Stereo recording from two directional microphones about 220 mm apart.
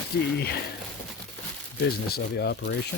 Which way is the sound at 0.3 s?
45° left (ahead or behind).